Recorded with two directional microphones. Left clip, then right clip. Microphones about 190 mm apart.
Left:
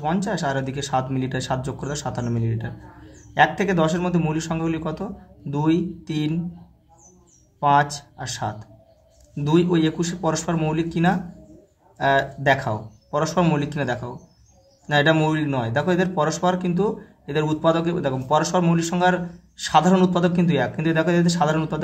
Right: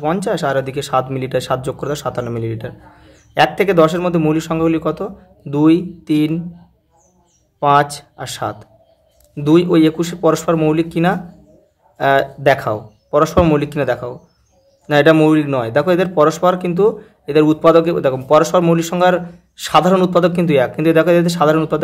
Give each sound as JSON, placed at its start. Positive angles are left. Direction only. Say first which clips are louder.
{"t": 0.0, "sound": "speech", "louder": "right 7 dB", "side_deg": -30}
{"t": 7.6, "sound": "speech", "louder": "right 5 dB", "side_deg": -35}